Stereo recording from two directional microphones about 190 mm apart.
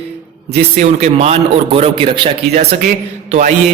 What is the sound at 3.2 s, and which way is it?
Mantra, 40° right (ahead or behind).